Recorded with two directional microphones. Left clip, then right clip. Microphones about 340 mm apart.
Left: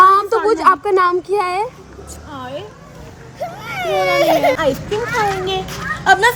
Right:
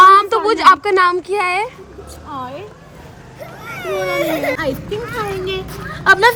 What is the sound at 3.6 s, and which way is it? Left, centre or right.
A child's voice, centre.